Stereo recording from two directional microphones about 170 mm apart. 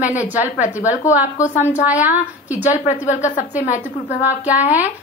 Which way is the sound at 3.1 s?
45° left (ahead or behind).